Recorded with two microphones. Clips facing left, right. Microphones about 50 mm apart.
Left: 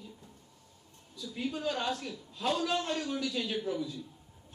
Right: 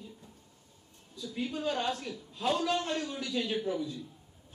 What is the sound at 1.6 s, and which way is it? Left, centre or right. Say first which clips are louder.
A man's voice: right 2 dB; centre.